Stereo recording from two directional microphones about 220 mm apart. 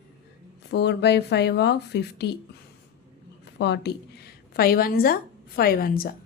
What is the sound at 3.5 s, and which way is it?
A woman's voice, 50° left (ahead or behind).